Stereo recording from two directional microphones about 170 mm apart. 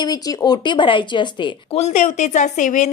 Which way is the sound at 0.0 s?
20° left (ahead or behind).